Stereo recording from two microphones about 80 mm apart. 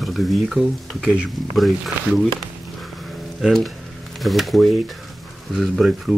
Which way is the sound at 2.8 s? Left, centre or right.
Centre.